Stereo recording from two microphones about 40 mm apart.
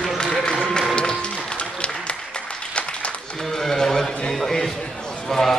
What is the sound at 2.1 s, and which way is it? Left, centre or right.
Applause, left.